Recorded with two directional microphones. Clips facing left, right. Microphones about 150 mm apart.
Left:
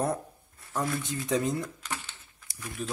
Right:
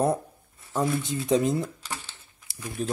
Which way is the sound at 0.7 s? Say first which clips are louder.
Right 5 dB; 25° right (ahead or behind).